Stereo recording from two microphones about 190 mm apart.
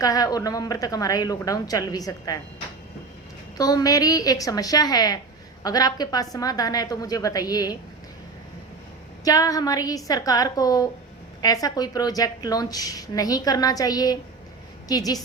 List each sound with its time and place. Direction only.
0.0 s a woman's voice: 20° left (ahead or behind)
3.6 s a woman's voice: 20° left (ahead or behind)
9.2 s a woman's voice: 20° left (ahead or behind)